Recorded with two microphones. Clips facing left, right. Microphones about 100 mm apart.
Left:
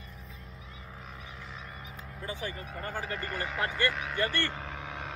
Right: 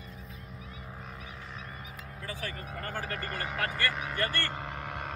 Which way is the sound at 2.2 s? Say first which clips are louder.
Left 2 dB; 20° left (ahead or behind).